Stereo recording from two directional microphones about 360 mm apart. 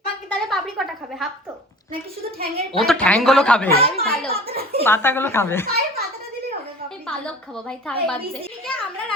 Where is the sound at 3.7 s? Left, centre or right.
Centre.